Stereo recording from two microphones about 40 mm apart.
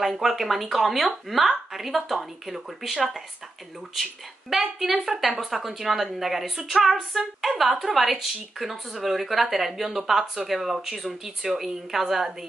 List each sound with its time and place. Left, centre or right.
0.0 s a woman's voice: centre